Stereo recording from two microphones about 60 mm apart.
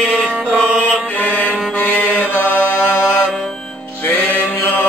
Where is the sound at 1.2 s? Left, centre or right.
Left.